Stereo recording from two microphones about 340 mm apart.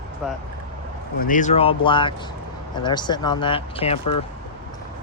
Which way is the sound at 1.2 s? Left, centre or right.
Left.